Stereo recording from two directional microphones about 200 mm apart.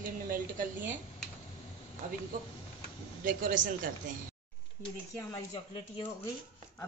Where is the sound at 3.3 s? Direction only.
45° right (ahead or behind).